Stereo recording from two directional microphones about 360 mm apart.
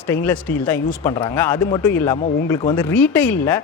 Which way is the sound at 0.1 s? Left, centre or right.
Centre.